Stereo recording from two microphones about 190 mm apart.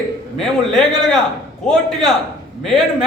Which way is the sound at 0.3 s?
Centre (ahead or behind).